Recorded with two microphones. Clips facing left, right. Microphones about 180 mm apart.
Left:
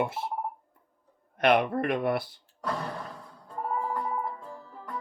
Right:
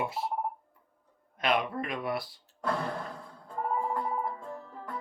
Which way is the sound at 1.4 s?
60° left (ahead or behind).